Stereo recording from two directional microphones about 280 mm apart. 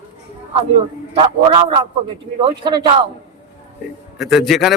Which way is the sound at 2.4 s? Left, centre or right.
Centre.